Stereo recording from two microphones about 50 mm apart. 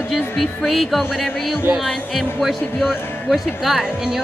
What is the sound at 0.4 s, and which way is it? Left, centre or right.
Speech, centre.